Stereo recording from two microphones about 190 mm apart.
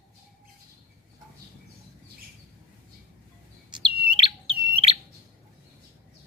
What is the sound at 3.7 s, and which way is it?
Bird, 25° right (ahead or behind).